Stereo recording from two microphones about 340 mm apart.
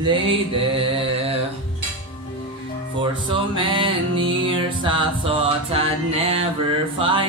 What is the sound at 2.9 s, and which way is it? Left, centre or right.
Music, centre.